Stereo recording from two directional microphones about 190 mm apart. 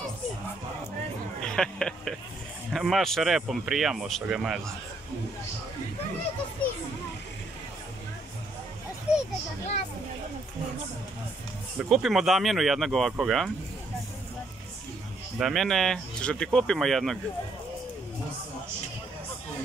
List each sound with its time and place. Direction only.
1.4 s speech: 5° left (ahead or behind)
9.1 s children playing: 5° right (ahead or behind)
11.8 s speech: centre (ahead or behind)
15.3 s speech: centre (ahead or behind)